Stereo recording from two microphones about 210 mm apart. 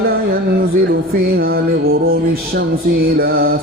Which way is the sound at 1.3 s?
45° right (ahead or behind).